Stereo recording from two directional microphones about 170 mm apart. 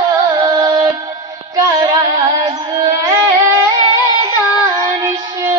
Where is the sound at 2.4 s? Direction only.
25° right (ahead or behind).